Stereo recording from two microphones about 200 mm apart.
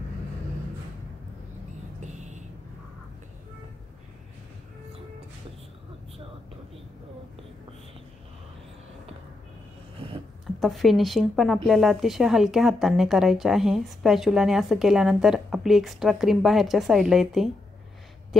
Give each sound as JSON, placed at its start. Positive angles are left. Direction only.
{"t": 2.0, "sound": "vehicle", "side_deg": -35}
{"t": 9.9, "sound": "a sound", "side_deg": -25}
{"t": 10.4, "sound": "speech", "side_deg": 0}